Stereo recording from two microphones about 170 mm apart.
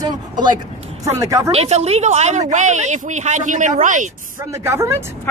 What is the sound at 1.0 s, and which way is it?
Speech, 20° right (ahead or behind).